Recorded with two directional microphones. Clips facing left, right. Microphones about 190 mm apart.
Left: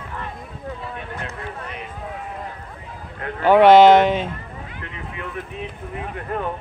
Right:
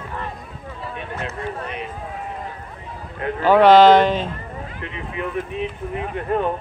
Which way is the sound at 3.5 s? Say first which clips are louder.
Left 1 dB; 10° left (ahead or behind).